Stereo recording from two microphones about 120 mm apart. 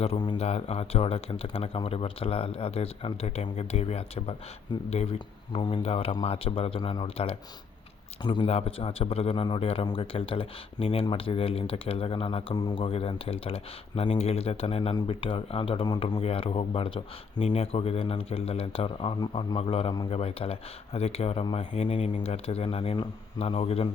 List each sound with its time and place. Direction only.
0.3 s speech: 60° left (ahead or behind); by 8.4 s 40° left (ahead or behind)
8.4 s speech: 55° left (ahead or behind)
12.5 s speech: 35° left (ahead or behind)
12.8 s speech: 50° left (ahead or behind)
16.0 s speech: 40° left (ahead or behind)
16.2 s speech: 55° left (ahead or behind)
17.3 s speech: 65° left (ahead or behind)